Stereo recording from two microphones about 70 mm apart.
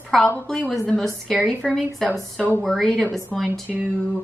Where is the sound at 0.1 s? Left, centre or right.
Centre.